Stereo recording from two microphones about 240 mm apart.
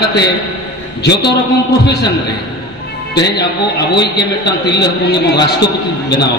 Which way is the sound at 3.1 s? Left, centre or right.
Left.